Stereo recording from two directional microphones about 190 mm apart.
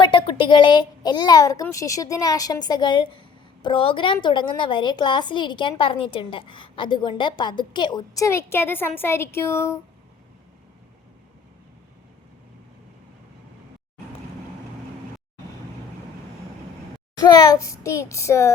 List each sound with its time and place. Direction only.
0.0 s a child's voice: 25° left (ahead or behind)
17.2 s a child's voice: 20° left (ahead or behind)